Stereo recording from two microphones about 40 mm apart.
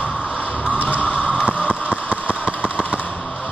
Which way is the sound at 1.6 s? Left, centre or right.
Right.